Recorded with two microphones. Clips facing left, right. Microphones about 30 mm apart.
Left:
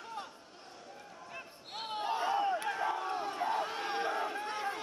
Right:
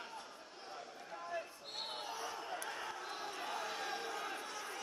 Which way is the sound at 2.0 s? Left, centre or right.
Left.